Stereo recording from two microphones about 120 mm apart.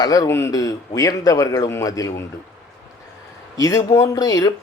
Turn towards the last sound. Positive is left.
turn(degrees=30)  # may be behind; listen again after turning